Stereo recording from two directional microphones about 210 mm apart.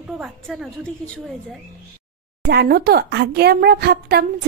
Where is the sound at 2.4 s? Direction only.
50° right (ahead or behind).